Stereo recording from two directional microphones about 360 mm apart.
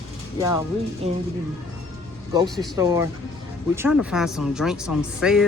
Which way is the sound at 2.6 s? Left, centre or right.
Centre.